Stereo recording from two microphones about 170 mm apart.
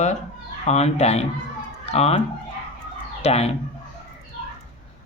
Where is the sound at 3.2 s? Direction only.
35° left (ahead or behind).